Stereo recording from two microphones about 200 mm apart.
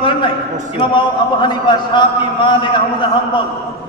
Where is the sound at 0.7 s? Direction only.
25° left (ahead or behind).